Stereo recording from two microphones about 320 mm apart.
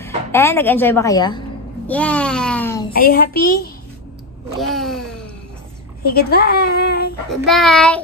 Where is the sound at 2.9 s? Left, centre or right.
Left.